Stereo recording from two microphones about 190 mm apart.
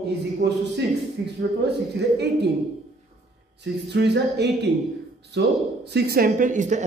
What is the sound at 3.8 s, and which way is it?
A woman's voice, 60° right (ahead or behind).